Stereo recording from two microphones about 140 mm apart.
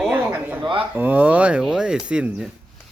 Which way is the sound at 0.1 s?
10° right (ahead or behind).